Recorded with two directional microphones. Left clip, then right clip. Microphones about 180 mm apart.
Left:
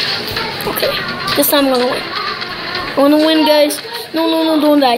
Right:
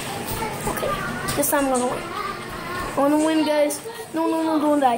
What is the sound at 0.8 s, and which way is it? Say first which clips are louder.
A woman's voice: left 10 dB; 30° left (ahead or behind).